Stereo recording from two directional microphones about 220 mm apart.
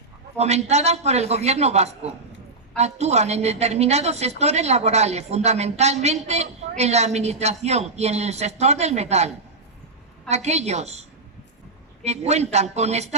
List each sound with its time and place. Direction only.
0.3 s a woman's voice: 30° right (ahead or behind)
12.0 s a man's voice: 30° right (ahead or behind)